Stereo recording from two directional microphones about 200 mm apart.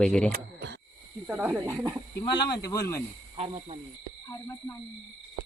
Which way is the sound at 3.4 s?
30° right (ahead or behind).